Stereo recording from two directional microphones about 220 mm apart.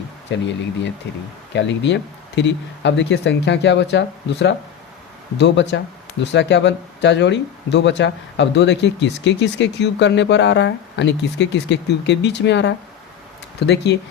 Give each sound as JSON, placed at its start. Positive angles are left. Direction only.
{"t": 0.3, "sound": "speech", "side_deg": 55}